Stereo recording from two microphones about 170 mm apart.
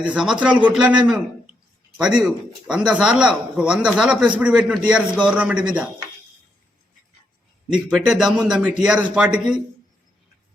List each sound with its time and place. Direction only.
0.0 s a man's voice: 5° right (ahead or behind)
7.7 s speech: 5° right (ahead or behind)